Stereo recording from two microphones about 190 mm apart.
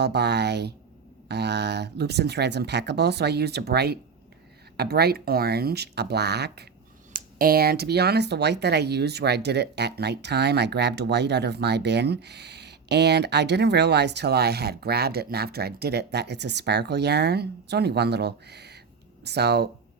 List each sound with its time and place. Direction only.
0.0 s speech: 60° right (ahead or behind)
7.1 s speech: 50° right (ahead or behind)